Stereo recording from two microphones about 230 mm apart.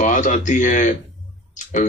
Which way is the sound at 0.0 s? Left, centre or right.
Left.